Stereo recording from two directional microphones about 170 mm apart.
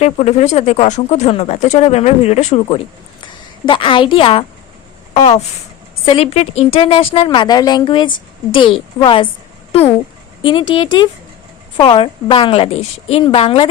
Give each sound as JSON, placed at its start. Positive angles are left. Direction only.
{"t": 0.0, "sound": "speech", "side_deg": 40}
{"t": 10.4, "sound": "speech", "side_deg": 30}